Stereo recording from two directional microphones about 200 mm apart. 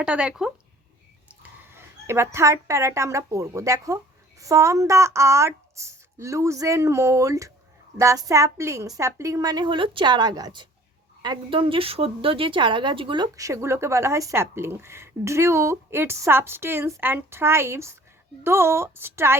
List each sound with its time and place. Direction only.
0.0 s a woman's voice: 5° right (ahead or behind)